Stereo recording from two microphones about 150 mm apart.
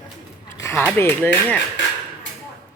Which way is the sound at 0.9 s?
10° left (ahead or behind).